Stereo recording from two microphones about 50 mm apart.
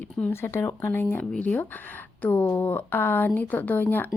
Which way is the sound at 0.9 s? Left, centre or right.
Left.